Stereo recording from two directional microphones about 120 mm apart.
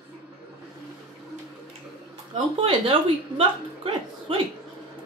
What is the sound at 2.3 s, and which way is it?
A woman's voice, 45° right (ahead or behind).